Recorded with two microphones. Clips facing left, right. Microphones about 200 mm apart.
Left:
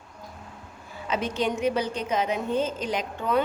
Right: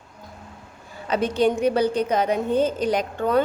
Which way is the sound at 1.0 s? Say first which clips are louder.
Right 6 dB; 35° right (ahead or behind).